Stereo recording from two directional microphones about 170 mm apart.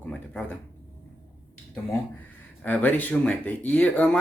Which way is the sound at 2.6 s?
10° left (ahead or behind).